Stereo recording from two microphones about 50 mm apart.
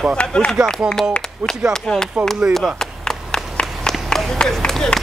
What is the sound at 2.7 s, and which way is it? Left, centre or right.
Clapping, centre.